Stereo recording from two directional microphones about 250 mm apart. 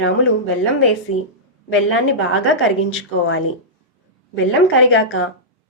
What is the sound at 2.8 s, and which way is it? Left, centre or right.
Speech, left.